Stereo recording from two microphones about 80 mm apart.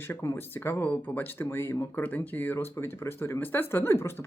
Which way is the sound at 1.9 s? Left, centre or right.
Centre.